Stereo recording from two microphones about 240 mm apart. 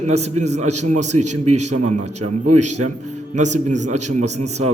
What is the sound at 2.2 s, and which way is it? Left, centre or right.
Speech, right.